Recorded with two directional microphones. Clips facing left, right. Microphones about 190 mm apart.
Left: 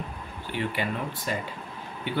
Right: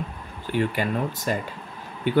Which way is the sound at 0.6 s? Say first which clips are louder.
Right 5 dB; 45° right (ahead or behind).